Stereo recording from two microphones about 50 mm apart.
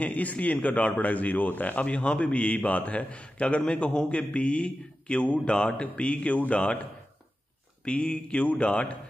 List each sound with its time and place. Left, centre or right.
0.0 s a man's voice: left
7.8 s a man's voice: centre